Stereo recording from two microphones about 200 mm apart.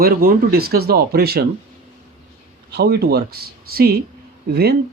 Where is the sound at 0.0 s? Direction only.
50° right (ahead or behind).